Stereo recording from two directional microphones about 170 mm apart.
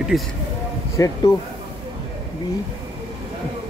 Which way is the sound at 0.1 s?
5° right (ahead or behind).